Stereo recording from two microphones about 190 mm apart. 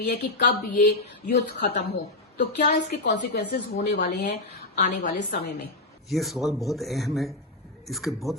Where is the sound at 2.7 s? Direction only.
65° left (ahead or behind).